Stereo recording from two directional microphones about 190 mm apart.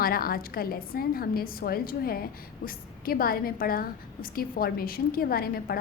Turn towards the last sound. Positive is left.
turn(degrees=50)  # may be behind; listen again after turning